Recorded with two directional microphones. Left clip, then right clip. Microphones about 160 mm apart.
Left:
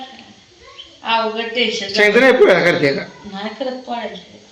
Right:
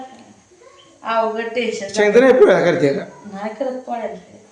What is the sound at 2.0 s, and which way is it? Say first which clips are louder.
Speech: even; 5° right (ahead or behind).